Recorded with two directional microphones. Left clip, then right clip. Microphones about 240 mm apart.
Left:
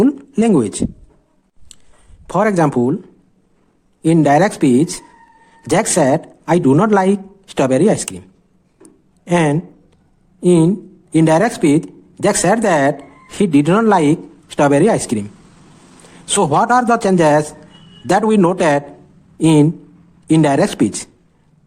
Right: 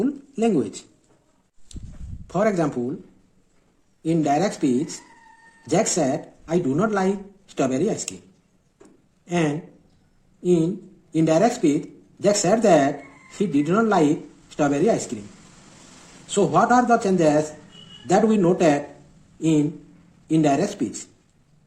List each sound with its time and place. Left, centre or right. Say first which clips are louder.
0.0 s a sound: left 8 dB; left
2.2 s speech: left 7 dB; left
4.1 s speech: left 9 dB; left
5.7 s speech: left 8 dB; left
9.2 s speech: left 9 dB; left
16.3 s speech: left 5 dB; left
20.3 s speech: left 7 dB; left